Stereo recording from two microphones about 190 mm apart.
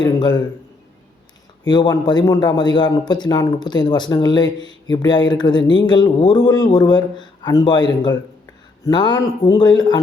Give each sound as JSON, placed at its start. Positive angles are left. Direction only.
{"t": 0.0, "sound": "a man's voice", "side_deg": 20}
{"t": 1.6, "sound": "speech", "side_deg": 20}